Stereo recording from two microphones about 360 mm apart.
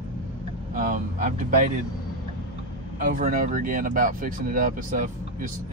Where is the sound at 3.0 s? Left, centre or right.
Right.